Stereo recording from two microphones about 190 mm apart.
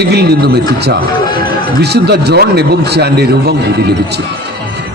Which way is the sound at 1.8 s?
60° right (ahead or behind).